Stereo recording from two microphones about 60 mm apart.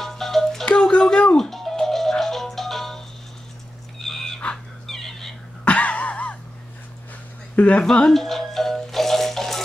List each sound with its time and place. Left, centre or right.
0.0 s music: centre
0.7 s music: centre
4.0 s a sound: centre
5.7 s a sound: left
7.5 s speech: left
7.8 s music: centre